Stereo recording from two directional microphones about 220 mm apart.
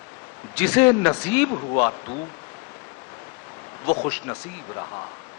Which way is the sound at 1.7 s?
25° left (ahead or behind).